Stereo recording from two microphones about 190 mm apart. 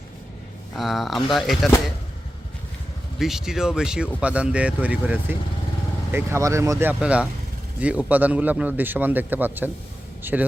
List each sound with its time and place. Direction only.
0.8 s speech: centre (ahead or behind)
3.2 s a man's voice: centre (ahead or behind)